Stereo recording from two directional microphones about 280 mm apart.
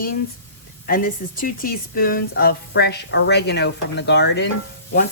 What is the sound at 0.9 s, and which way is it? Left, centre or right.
Speech, left.